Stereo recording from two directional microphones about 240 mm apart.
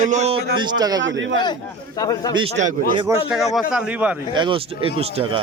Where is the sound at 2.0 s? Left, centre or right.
Centre.